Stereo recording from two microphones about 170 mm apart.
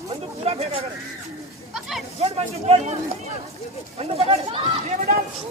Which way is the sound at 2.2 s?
35° right (ahead or behind).